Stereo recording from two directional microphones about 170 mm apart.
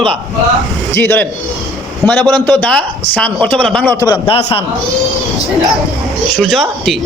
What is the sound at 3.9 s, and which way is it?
Speech, 20° left (ahead or behind).